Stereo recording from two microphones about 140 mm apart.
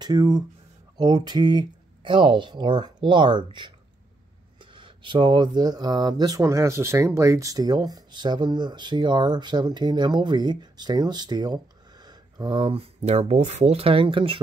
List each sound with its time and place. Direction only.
0.0 s speech: 30° right (ahead or behind)